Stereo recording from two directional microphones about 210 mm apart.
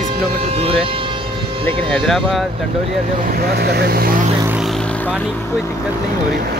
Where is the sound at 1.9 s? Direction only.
Centre (ahead or behind).